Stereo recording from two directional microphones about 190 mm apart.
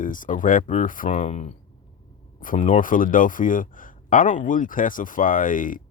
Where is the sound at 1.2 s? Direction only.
35° left (ahead or behind).